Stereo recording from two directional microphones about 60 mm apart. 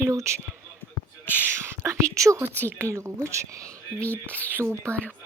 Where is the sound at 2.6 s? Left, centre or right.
Right.